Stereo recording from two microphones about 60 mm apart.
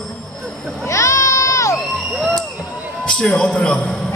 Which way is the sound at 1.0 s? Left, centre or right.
Left.